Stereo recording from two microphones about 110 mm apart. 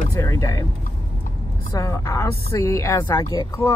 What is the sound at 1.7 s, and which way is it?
Speech, 25° left (ahead or behind).